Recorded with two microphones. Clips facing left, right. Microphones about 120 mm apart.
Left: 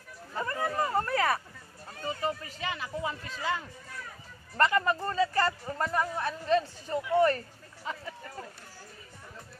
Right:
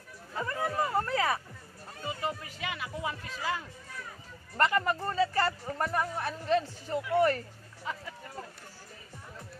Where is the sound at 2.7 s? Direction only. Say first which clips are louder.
Left 2 dB; 10° right (ahead or behind).